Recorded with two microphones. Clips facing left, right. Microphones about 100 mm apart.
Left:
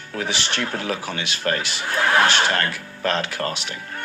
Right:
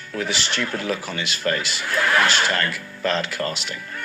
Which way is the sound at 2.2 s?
50° left (ahead or behind).